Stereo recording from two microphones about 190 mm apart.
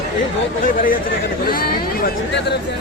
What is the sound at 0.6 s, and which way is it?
Speech, 45° left (ahead or behind).